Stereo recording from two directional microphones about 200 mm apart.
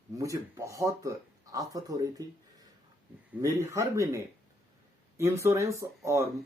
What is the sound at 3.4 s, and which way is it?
Speech, 15° right (ahead or behind).